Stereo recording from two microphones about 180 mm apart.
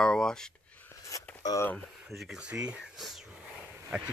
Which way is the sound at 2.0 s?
Centre (ahead or behind).